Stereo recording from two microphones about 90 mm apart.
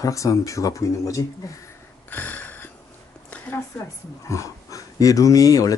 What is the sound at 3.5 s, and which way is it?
Speech, 30° left (ahead or behind).